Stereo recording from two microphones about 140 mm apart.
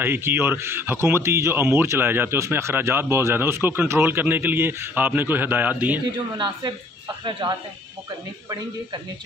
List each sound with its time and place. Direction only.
0.0 s speech: 15° right (ahead or behind)
6.3 s speech: 30° right (ahead or behind)